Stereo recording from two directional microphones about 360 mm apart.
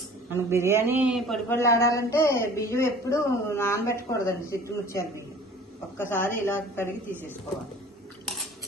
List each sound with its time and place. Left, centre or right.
0.3 s a man's voice: centre